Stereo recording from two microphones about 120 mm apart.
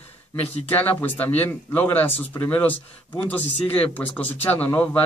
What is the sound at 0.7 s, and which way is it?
A man's voice, 15° left (ahead or behind).